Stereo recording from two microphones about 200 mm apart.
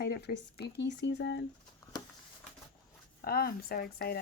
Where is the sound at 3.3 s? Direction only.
50° left (ahead or behind).